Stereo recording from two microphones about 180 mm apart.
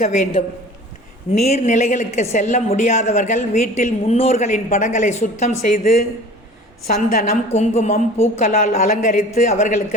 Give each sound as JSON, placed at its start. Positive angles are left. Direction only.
{"t": 0.0, "sound": "a woman's voice", "side_deg": 40}
{"t": 7.5, "sound": "a woman's voice", "side_deg": 40}
{"t": 8.4, "sound": "a woman's voice", "side_deg": 50}